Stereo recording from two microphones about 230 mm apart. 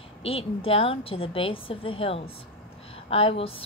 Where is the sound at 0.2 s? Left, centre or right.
Left.